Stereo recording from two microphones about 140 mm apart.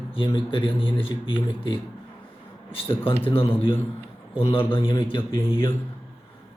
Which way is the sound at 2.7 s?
40° left (ahead or behind).